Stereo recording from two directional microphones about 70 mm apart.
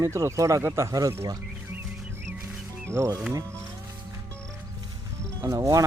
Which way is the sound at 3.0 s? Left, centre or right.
Right.